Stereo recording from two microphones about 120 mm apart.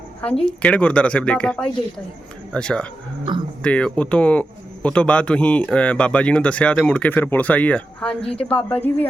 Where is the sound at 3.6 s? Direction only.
10° left (ahead or behind).